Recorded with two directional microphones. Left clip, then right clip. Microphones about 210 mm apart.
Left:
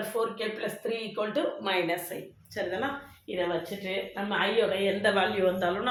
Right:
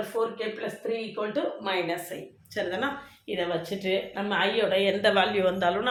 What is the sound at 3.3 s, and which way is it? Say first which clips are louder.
Speech: right 1 dB; 55° right (ahead or behind).